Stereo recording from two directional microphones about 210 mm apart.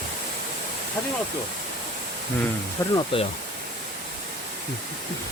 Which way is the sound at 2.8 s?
15° left (ahead or behind).